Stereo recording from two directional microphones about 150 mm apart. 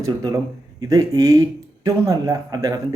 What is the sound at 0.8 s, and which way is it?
Speech, 25° right (ahead or behind).